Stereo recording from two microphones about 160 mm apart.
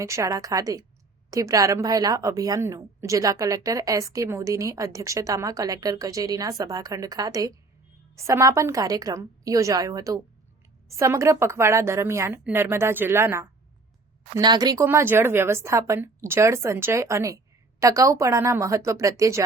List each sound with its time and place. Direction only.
0.0 s a woman's voice: 20° right (ahead or behind)